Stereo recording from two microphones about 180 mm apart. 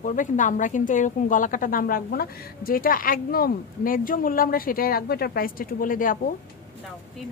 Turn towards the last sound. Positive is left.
turn(degrees=50)  # may be behind; listen again after turning